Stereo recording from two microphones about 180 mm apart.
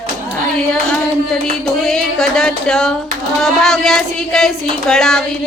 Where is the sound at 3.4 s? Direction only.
Centre (ahead or behind).